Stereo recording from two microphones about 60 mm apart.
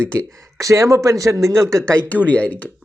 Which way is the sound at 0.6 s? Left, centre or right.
Right.